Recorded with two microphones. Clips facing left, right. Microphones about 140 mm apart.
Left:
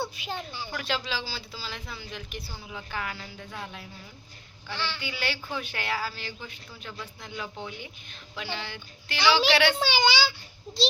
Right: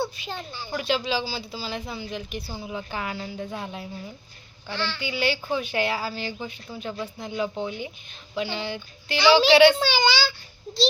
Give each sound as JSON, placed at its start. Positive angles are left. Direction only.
{"t": 0.0, "sound": "a woman's voice", "side_deg": 10}
{"t": 0.7, "sound": "a woman's voice", "side_deg": -15}
{"t": 4.9, "sound": "a woman's voice", "side_deg": -15}
{"t": 9.7, "sound": "a woman's voice", "side_deg": 15}